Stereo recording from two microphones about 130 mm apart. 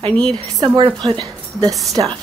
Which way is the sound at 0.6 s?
25° right (ahead or behind).